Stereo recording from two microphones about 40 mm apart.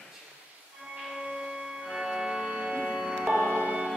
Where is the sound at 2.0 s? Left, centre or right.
Centre.